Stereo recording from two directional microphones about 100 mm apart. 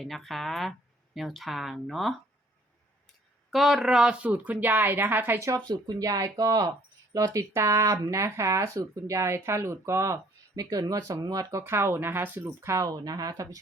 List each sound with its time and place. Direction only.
0.0 s speech: centre (ahead or behind)
3.5 s a woman's voice: centre (ahead or behind); by 5.6 s 30° right (ahead or behind)
5.6 s speech: 45° right (ahead or behind)
11.6 s a woman's voice: 25° right (ahead or behind)